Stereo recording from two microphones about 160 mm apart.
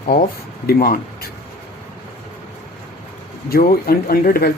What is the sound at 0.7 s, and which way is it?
Speech, 65° left (ahead or behind).